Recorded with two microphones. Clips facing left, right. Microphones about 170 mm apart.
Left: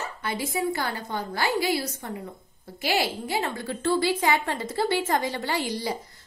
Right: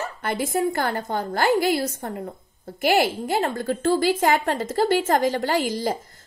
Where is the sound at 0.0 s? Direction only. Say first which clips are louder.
Right 4 dB; 50° right (ahead or behind).